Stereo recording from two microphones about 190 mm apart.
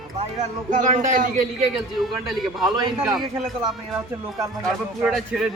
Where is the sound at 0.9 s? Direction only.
40° right (ahead or behind).